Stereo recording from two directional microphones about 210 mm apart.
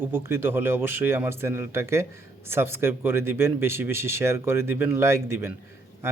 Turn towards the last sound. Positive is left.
turn(degrees=-10)  # may be behind; listen again after turning